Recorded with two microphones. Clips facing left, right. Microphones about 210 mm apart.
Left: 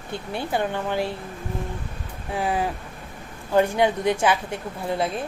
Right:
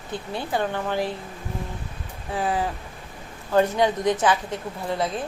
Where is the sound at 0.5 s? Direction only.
15° left (ahead or behind).